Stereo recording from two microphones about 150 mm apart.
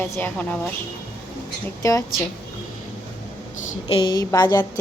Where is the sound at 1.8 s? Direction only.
20° left (ahead or behind).